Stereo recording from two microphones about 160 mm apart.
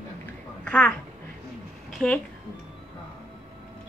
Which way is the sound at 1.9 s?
5° left (ahead or behind).